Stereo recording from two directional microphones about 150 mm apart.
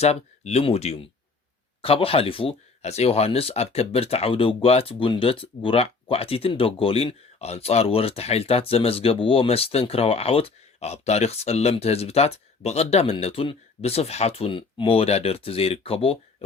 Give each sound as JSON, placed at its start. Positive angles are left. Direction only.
{"t": 0.0, "sound": "speech", "side_deg": 45}